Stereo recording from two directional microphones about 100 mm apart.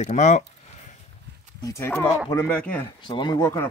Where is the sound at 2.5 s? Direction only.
15° left (ahead or behind).